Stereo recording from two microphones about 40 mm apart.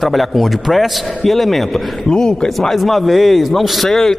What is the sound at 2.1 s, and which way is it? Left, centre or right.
Speech, centre.